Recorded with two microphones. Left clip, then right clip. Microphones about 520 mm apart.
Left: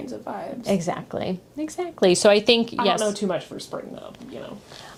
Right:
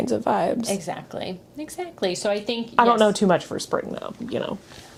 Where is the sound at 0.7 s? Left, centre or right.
Left.